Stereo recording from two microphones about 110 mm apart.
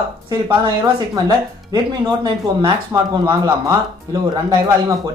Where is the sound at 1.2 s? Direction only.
40° right (ahead or behind).